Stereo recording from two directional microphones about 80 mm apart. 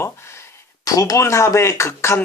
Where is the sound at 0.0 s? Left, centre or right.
Left.